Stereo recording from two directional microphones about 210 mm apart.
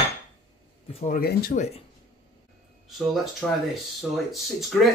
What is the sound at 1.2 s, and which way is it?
Speech, 45° left (ahead or behind).